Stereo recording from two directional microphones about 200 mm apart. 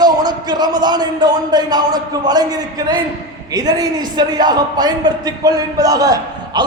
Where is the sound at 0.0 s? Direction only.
20° right (ahead or behind).